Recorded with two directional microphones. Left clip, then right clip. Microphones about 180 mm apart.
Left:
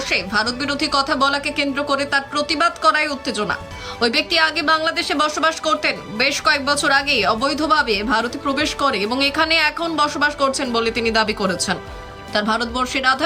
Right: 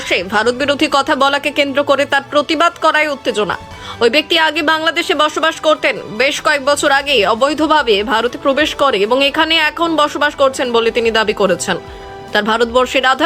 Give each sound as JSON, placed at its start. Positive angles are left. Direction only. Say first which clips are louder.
{"t": 0.1, "sound": "a woman's voice", "louder": "right 7 dB", "side_deg": -20}